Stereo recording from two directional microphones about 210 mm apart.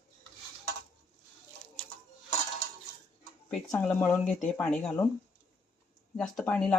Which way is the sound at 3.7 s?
10° left (ahead or behind).